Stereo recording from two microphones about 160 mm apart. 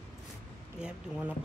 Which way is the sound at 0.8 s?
10° right (ahead or behind).